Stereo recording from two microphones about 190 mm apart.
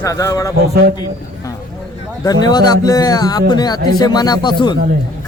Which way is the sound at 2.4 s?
20° left (ahead or behind).